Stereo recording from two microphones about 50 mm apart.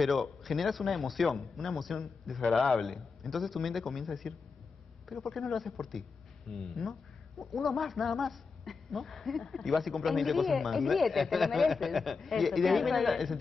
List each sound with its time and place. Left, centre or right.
0.0 s speech: centre